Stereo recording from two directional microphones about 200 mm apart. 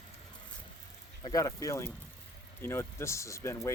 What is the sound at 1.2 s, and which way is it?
Speech, 20° left (ahead or behind).